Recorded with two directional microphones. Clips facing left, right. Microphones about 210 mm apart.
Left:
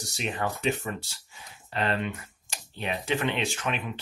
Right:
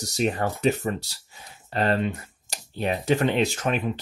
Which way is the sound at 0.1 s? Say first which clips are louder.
Right 6 dB; 40° right (ahead or behind).